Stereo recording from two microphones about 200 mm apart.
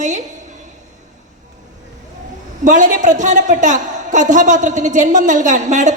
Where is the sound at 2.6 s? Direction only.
40° right (ahead or behind).